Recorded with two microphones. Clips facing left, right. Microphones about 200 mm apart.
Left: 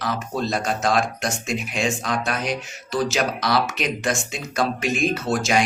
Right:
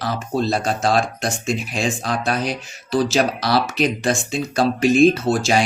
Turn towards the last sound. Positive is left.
turn(degrees=-30)  # may be behind; listen again after turning